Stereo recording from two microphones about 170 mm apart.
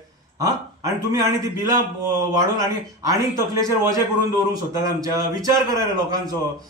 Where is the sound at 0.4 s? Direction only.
20° right (ahead or behind).